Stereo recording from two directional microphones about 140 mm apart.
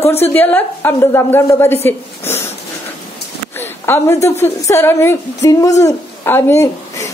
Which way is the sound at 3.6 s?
15° left (ahead or behind).